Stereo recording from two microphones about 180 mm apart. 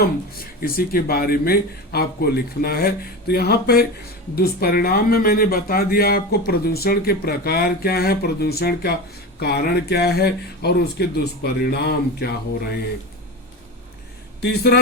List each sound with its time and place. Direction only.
0.0 s speech: 55° left (ahead or behind)
14.4 s speech: 65° left (ahead or behind)